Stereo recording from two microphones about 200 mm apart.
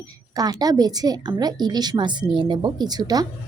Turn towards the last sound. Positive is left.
turn(degrees=-20)  # may be behind; listen again after turning